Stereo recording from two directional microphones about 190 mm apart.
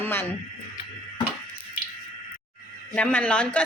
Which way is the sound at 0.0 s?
10° left (ahead or behind).